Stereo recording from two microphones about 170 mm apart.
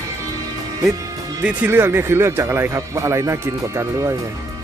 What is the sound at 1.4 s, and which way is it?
Speech, 10° right (ahead or behind).